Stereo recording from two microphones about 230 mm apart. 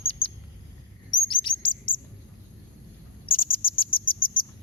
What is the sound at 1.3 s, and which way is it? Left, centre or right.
Bird, left.